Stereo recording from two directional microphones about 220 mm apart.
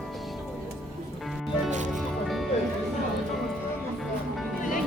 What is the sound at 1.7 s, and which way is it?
Music, 35° right (ahead or behind).